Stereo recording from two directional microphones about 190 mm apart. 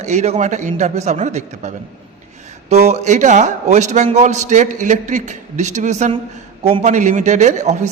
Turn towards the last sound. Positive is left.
turn(degrees=-35)  # may be behind; listen again after turning